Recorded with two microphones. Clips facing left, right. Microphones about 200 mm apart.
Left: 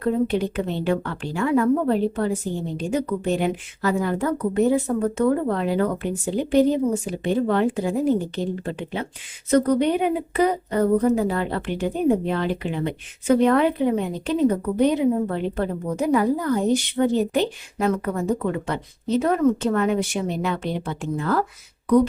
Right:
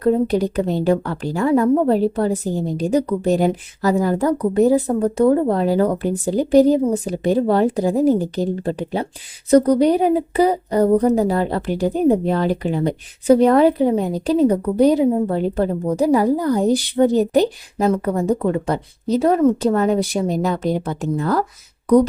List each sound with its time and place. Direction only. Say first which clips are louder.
0.0 s speech: right 5 dB; 40° right (ahead or behind)